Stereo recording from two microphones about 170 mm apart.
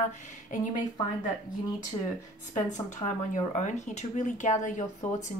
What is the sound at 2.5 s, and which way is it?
Speech, 45° left (ahead or behind).